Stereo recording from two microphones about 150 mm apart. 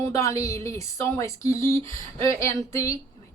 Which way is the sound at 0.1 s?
20° left (ahead or behind).